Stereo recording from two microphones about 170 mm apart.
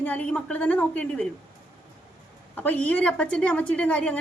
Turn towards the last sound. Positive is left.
turn(degrees=10)  # may be behind; listen again after turning